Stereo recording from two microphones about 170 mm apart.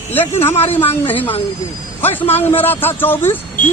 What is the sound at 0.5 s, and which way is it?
Speech, 35° left (ahead or behind).